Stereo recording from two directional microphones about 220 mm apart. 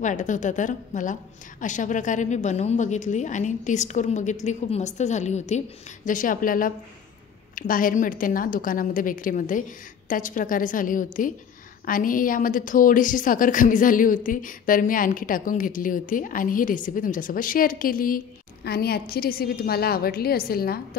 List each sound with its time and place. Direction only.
0.0 s a woman's voice: 35° left (ahead or behind)